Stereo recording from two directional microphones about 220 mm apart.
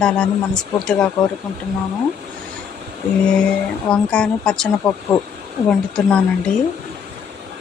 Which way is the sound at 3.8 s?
5° left (ahead or behind).